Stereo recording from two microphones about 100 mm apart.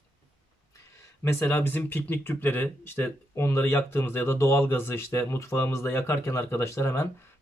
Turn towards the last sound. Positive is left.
turn(degrees=25)  # may be behind; listen again after turning